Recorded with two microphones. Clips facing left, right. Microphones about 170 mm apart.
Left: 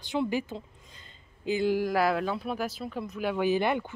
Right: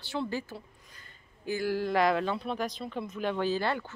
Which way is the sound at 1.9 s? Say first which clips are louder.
Even; 5° left (ahead or behind).